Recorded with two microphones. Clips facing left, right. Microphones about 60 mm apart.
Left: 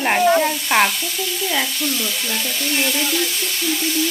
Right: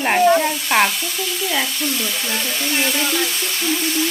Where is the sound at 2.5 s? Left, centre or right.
Right.